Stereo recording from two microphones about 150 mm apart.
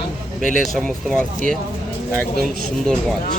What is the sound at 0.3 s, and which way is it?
Speech, centre (ahead or behind).